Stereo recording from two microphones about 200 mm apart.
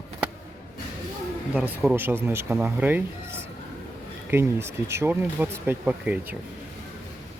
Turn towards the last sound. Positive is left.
turn(degrees=-10)  # may be behind; listen again after turning